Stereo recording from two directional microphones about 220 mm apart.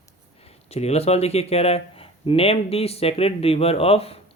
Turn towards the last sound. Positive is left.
turn(degrees=25)  # may be behind; listen again after turning